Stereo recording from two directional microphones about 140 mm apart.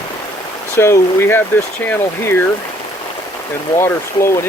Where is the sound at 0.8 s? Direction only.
20° left (ahead or behind).